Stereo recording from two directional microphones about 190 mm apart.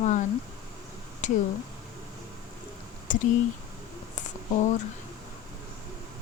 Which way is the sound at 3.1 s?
40° left (ahead or behind).